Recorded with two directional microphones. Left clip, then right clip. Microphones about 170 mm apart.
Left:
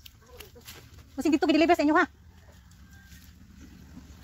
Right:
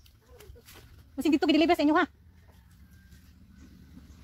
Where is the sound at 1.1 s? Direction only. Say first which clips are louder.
Left 1 dB; 25° right (ahead or behind).